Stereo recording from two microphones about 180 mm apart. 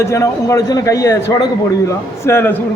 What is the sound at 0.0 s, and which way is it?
A man's voice, 15° left (ahead or behind).